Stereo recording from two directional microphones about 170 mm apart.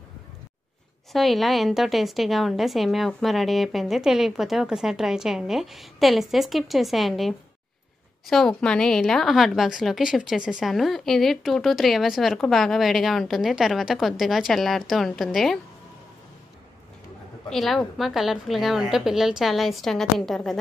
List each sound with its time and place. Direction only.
1.1 s a woman's voice: centre (ahead or behind)
17.5 s a woman's voice: centre (ahead or behind)